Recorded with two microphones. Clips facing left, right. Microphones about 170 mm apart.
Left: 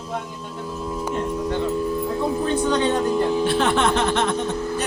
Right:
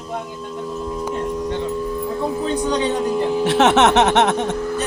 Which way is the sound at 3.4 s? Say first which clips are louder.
Right 5 dB; 80° right.